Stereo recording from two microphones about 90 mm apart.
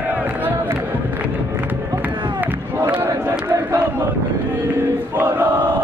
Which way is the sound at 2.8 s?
25° right (ahead or behind).